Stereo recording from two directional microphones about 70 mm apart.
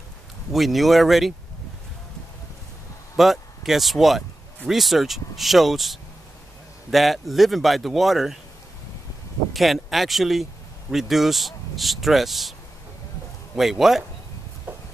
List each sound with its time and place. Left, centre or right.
0.5 s speech: centre
3.2 s speech: centre
9.5 s speech: centre
13.6 s speech: centre
14.7 s a sound: right